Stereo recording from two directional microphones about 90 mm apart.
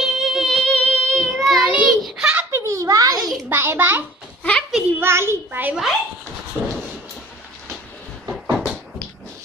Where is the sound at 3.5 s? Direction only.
25° right (ahead or behind).